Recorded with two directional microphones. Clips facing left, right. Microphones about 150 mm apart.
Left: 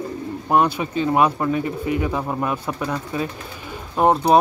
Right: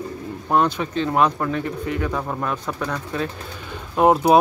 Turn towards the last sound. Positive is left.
turn(degrees=-5)  # may be behind; listen again after turning